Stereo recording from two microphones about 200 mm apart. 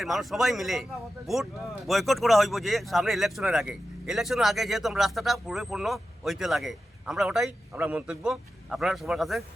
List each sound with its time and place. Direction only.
0.0 s speech: centre (ahead or behind)
1.9 s speech: centre (ahead or behind)